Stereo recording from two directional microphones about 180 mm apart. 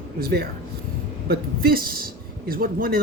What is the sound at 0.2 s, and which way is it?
Speech, 60° right (ahead or behind).